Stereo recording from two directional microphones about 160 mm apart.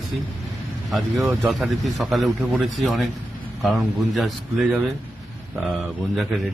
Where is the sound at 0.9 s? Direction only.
Centre (ahead or behind).